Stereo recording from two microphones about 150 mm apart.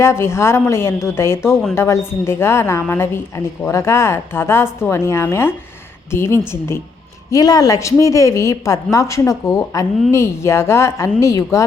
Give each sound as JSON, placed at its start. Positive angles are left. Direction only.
{"t": 0.0, "sound": "a woman's voice", "side_deg": 15}